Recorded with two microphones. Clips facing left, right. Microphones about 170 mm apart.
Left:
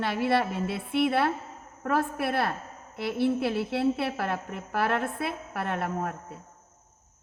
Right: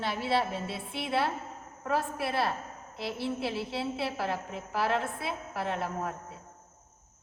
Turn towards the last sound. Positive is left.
turn(degrees=60)  # may be behind; listen again after turning